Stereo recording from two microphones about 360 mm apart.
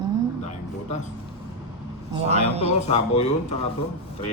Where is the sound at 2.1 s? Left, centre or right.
Centre.